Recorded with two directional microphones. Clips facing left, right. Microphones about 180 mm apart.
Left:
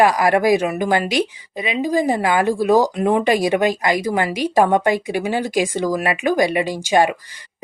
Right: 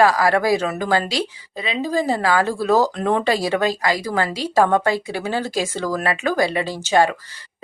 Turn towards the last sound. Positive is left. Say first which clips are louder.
# left 1 dB
turn(degrees=15)  # may be behind; listen again after turning